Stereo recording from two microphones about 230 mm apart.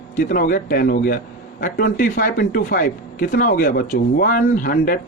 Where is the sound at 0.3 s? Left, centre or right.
Left.